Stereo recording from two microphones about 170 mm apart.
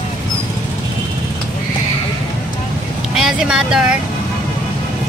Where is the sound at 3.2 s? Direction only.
5° right (ahead or behind).